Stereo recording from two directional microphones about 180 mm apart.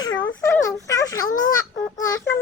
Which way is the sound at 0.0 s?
25° left (ahead or behind).